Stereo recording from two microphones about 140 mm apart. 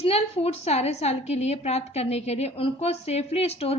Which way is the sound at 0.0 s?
45° left (ahead or behind).